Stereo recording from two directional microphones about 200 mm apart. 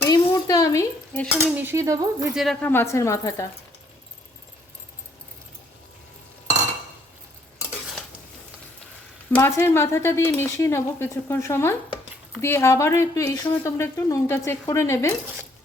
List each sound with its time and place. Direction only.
0.0 s dishes: 15° left (ahead or behind)
1.3 s cutlery: 10° right (ahead or behind)
2.3 s speech: centre (ahead or behind)
9.4 s speech: 15° left (ahead or behind)